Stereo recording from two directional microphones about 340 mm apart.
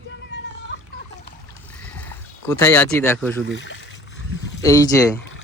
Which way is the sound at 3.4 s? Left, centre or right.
Left.